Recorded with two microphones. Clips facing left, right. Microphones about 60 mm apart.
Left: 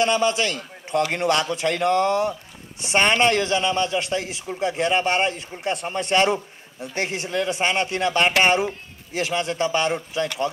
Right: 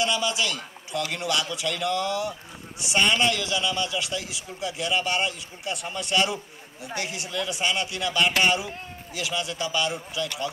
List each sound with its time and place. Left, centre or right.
0.0 s a man's voice: left